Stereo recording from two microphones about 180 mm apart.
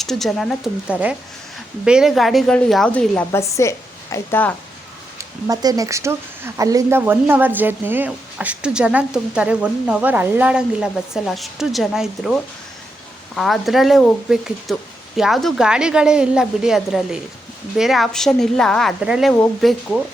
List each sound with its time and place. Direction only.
0.0 s a woman's voice: centre (ahead or behind)
5.1 s speech: 20° right (ahead or behind); by 20.0 s 5° left (ahead or behind)